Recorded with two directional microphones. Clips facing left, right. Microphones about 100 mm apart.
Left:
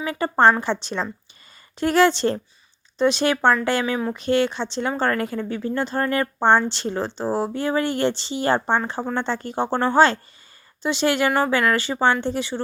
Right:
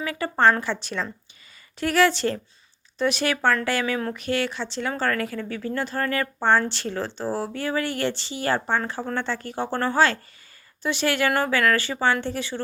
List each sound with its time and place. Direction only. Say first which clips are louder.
0.0 s a woman's voice: left 3 dB; 30° left (ahead or behind)